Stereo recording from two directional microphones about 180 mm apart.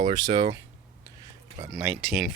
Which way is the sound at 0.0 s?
20° right (ahead or behind).